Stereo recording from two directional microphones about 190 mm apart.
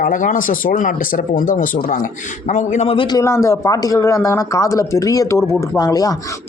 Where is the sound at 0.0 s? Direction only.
45° left (ahead or behind).